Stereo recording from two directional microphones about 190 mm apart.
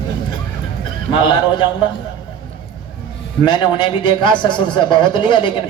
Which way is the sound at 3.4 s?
25° left (ahead or behind).